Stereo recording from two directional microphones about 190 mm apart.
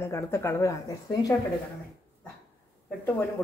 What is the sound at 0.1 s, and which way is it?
Speech, 15° left (ahead or behind).